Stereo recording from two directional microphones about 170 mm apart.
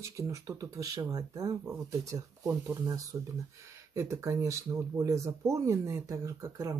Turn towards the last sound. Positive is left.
turn(degrees=-20)  # may be behind; listen again after turning